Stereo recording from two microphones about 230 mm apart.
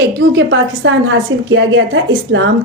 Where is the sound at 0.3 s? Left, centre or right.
Right.